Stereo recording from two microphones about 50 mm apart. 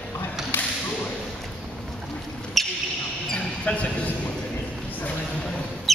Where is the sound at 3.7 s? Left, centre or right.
Left.